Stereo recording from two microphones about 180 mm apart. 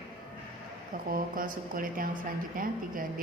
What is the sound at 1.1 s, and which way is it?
A woman's voice, 50° right (ahead or behind).